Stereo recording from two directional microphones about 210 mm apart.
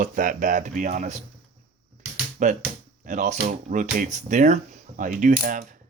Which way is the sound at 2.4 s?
35° right (ahead or behind).